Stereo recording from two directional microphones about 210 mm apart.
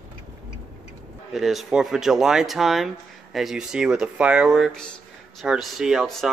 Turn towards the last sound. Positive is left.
turn(degrees=0)  # may be behind; listen again after turning